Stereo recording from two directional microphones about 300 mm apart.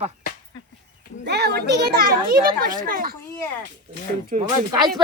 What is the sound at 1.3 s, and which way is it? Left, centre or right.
A child's voice, right.